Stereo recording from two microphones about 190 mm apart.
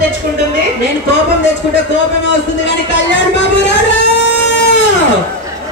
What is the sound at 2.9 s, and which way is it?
Speech, 70° left (ahead or behind).